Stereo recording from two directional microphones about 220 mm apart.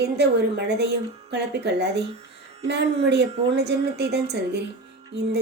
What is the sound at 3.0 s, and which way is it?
A woman's voice, 50° right (ahead or behind).